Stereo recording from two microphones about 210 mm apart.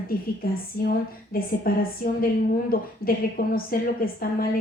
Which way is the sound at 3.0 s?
45° left (ahead or behind).